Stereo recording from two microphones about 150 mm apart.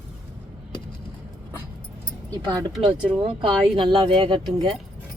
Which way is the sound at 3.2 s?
35° right (ahead or behind).